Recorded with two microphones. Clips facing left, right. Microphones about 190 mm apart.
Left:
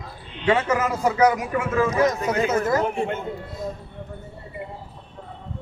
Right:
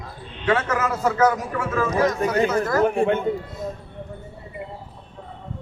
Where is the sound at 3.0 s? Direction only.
60° right (ahead or behind).